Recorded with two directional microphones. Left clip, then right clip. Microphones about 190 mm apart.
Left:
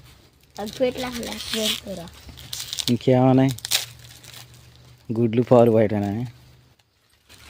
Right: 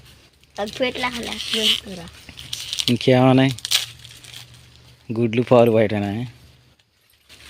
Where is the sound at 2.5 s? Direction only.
35° left (ahead or behind).